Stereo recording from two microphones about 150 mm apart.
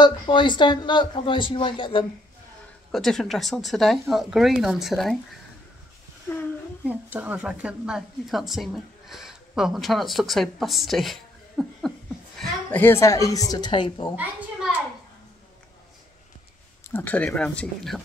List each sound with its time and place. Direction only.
0.0 s speech: 30° left (ahead or behind)
2.9 s a woman's voice: 5° left (ahead or behind)
6.9 s a woman's voice: 10° right (ahead or behind)
12.4 s a woman's voice: 10° left (ahead or behind); by 14.1 s 30° left (ahead or behind)
14.1 s a child's voice: 10° right (ahead or behind)
16.9 s speech: 10° left (ahead or behind)